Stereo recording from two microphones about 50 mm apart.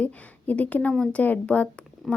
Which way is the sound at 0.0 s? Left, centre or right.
Left.